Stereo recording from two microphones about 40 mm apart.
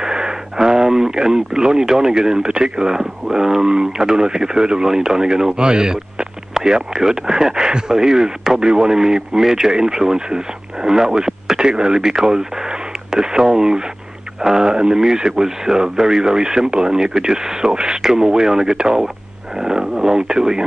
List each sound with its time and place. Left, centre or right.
0.0 s speech: centre